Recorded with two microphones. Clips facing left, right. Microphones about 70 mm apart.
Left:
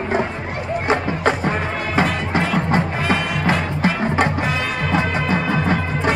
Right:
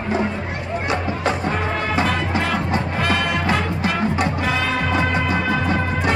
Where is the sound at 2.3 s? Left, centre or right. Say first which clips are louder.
Left 2 dB; left.